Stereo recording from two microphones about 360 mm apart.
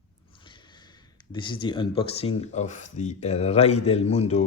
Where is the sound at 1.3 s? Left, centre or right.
Centre.